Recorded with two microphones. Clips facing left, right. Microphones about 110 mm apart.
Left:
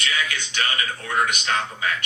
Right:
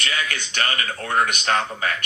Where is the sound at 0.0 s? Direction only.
50° right (ahead or behind).